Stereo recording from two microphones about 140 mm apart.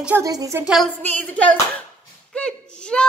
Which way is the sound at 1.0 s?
10° left (ahead or behind).